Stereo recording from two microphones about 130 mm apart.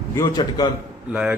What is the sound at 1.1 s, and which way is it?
Speech, 10° right (ahead or behind).